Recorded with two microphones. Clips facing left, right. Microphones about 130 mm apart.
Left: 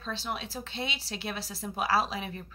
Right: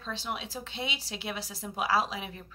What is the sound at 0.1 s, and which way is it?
Speech, 15° right (ahead or behind).